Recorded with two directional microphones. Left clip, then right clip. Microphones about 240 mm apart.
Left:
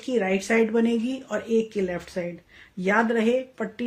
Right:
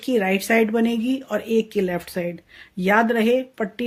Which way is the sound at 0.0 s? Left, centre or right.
Right.